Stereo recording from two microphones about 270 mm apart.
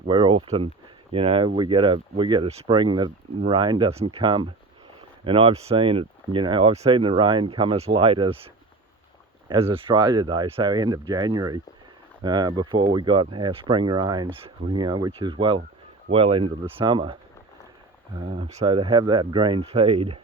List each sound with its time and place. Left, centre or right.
0.0 s speech: centre
9.5 s speech: centre
18.3 s speech: right